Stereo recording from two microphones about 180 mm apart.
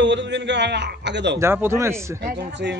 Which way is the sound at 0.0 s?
85° right.